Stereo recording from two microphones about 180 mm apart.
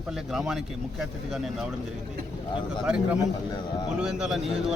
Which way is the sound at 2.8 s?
5° right (ahead or behind).